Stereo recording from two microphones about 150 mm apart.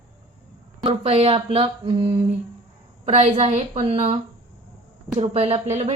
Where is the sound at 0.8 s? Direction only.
40° right (ahead or behind).